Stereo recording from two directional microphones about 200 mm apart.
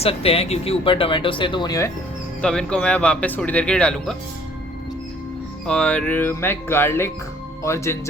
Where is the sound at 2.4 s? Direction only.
5° left (ahead or behind).